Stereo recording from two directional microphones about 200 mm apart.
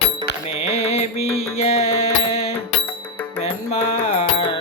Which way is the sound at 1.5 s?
30° left (ahead or behind).